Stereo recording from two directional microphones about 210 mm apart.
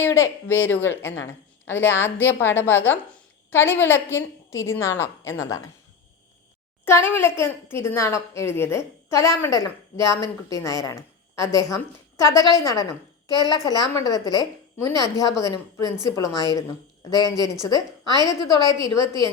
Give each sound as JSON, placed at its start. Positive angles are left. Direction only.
{"t": 0.0, "sound": "a child's voice", "side_deg": 10}
{"t": 6.8, "sound": "a child's voice", "side_deg": 10}